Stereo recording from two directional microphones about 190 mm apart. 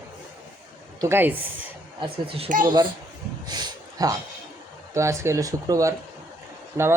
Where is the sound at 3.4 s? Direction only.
20° right (ahead or behind).